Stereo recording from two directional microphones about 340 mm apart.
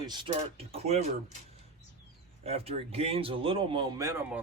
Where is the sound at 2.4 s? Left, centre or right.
Centre.